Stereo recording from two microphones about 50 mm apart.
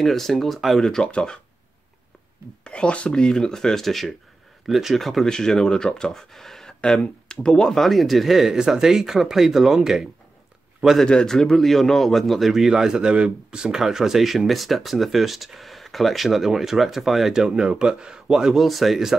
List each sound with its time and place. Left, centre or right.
0.0 s speech: centre
1.0 s speech: centre
2.6 s speech: left
7.8 s speech: centre
11.1 s speech: centre